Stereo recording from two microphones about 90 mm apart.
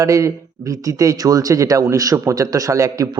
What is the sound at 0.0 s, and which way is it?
Speech, 35° right (ahead or behind).